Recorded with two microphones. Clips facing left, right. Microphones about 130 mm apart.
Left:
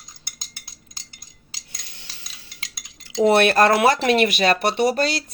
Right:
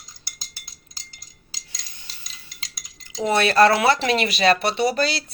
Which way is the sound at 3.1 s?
65° left (ahead or behind).